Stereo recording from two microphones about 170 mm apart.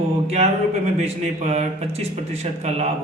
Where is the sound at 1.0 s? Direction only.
40° right (ahead or behind).